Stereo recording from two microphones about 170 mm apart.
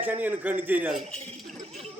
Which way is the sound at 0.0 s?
10° right (ahead or behind).